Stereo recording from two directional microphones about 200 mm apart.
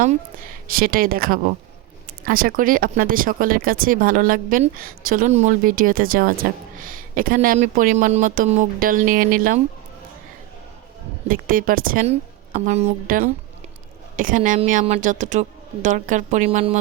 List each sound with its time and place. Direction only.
0.7 s speech: 45° right (ahead or behind)
11.3 s speech: 45° right (ahead or behind)
12.5 s a woman's voice: 35° right (ahead or behind)